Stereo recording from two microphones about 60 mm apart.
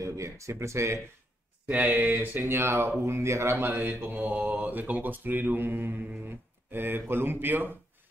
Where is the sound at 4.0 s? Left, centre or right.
Right.